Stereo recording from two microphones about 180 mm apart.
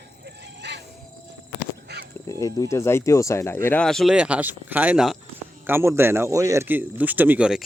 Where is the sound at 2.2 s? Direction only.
15° left (ahead or behind).